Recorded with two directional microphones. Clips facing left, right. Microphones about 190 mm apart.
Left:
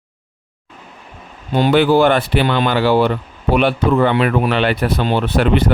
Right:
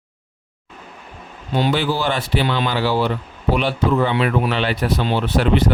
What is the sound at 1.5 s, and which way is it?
A man's voice, 55° left (ahead or behind).